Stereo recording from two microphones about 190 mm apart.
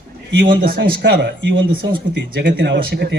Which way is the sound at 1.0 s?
65° right (ahead or behind).